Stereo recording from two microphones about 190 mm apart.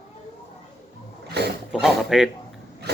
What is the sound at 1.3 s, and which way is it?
Roaring cats, 60° right (ahead or behind).